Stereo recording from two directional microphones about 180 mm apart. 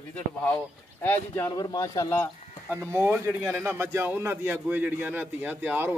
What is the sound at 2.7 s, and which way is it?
A man's voice, 10° right (ahead or behind).